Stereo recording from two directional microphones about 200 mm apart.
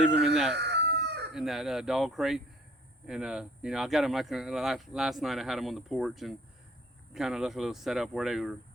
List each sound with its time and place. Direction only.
0.0 s speech: centre (ahead or behind)
0.5 s chicken: 60° right (ahead or behind)
1.3 s speech: centre (ahead or behind)